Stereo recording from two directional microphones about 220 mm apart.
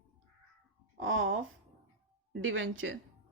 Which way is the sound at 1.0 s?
65° right (ahead or behind).